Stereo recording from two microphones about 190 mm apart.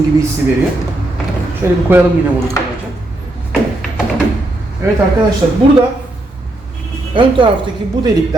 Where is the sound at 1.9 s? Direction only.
10° right (ahead or behind).